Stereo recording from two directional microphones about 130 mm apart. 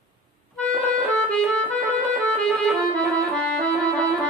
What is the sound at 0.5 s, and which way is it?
Music, 10° left (ahead or behind).